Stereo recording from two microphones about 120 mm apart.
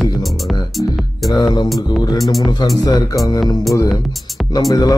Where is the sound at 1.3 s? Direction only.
30° left (ahead or behind).